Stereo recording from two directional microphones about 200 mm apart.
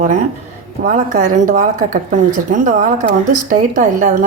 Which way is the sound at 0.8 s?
45° right (ahead or behind).